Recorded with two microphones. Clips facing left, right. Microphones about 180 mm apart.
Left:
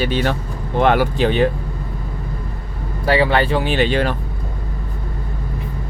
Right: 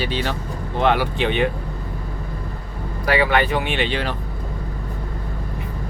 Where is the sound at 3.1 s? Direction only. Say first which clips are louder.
Left 3 dB; 30° left (ahead or behind); by 4.1 s 45° left (ahead or behind).